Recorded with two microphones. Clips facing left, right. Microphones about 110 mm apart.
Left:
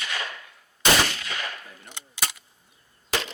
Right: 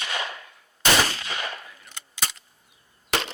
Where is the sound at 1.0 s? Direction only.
30° right (ahead or behind).